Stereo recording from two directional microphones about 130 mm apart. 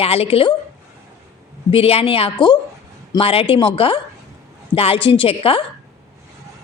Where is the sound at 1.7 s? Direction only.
50° left (ahead or behind).